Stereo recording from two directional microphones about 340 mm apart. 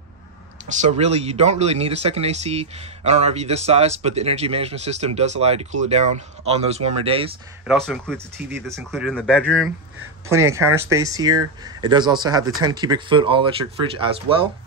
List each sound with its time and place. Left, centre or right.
0.7 s speech: right
7.6 s speech: centre
10.2 s speech: centre